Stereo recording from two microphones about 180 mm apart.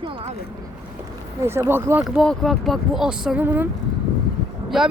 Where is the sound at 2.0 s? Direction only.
Centre (ahead or behind).